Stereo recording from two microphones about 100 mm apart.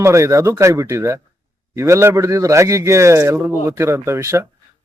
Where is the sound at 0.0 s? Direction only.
30° right (ahead or behind).